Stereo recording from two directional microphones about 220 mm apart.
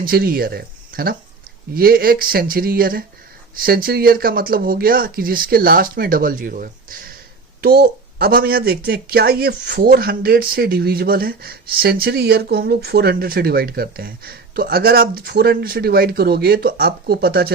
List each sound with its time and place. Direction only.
0.0 s speech: 40° right (ahead or behind)